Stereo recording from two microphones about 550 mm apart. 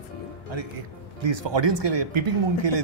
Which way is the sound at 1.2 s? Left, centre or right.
Right.